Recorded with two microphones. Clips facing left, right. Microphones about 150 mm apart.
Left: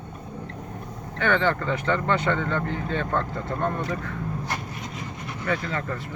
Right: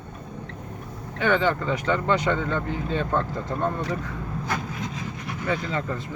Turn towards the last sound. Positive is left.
turn(degrees=-20)  # may be behind; listen again after turning